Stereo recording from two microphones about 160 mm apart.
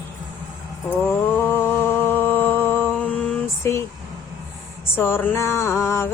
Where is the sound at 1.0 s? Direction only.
15° left (ahead or behind).